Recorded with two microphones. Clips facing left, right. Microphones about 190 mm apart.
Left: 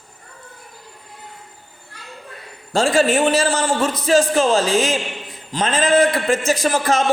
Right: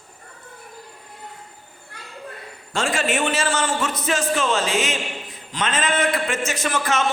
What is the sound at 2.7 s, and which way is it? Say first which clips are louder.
A man's voice: left 7 dB; 35° left (ahead or behind).